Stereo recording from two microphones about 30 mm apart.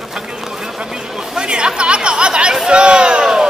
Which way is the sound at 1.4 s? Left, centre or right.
Right.